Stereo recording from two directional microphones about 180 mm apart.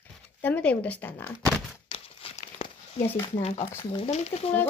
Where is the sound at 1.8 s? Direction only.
30° left (ahead or behind).